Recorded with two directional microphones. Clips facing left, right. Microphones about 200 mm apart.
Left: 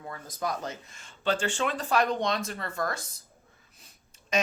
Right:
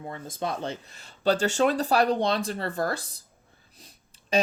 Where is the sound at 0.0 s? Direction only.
25° right (ahead or behind).